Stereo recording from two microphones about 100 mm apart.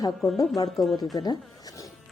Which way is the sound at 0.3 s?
35° left (ahead or behind).